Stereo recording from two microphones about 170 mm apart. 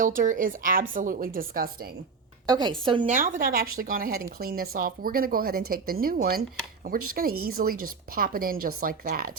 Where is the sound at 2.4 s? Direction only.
25° right (ahead or behind).